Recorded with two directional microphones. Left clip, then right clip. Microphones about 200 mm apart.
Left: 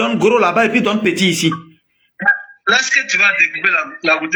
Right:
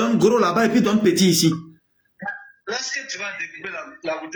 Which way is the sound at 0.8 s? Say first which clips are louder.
Left 3 dB; centre (ahead or behind).